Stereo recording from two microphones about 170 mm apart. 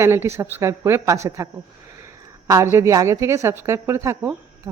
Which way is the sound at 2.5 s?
15° right (ahead or behind).